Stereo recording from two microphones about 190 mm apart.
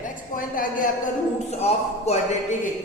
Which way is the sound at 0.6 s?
45° left (ahead or behind).